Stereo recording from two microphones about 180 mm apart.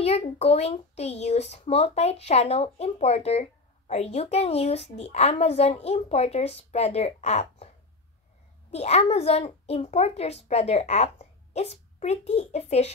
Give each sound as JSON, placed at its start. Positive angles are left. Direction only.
{"t": 0.0, "sound": "speech", "side_deg": 35}
{"t": 8.7, "sound": "speech", "side_deg": 35}